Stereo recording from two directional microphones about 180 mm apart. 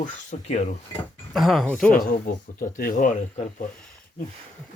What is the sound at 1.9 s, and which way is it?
Speech, 50° left (ahead or behind).